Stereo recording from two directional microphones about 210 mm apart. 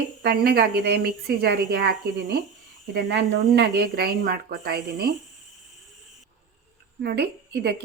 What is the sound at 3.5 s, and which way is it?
A woman's voice, 50° right (ahead or behind).